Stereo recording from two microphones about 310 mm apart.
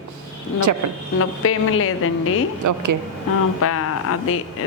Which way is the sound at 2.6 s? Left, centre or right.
Right.